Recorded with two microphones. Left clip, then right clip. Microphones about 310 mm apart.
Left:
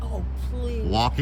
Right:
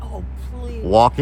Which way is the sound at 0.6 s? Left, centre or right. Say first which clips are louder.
Right 11 dB; centre.